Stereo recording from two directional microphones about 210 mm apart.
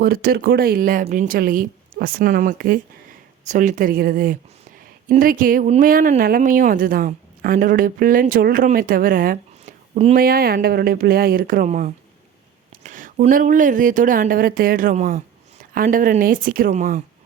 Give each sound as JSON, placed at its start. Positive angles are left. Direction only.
{"t": 0.0, "sound": "a woman's voice", "side_deg": -45}
{"t": 10.2, "sound": "a woman's voice", "side_deg": -45}